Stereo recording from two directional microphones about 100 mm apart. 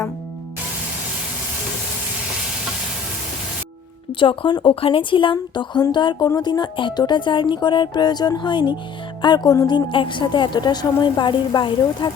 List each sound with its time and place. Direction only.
4.2 s speech: 55° left (ahead or behind)
4.7 s a woman's voice: 65° left (ahead or behind); by 12.1 s 45° left (ahead or behind)